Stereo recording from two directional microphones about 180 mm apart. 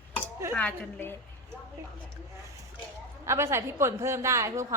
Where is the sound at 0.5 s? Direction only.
10° left (ahead or behind).